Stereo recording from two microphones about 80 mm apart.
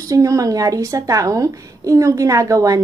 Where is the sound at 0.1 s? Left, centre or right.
Right.